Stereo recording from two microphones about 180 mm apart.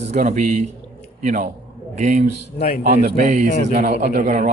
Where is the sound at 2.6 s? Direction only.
60° left (ahead or behind).